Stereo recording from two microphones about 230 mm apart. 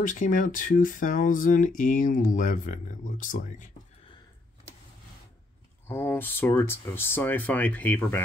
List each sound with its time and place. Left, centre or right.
0.0 s speech: left
5.9 s speech: centre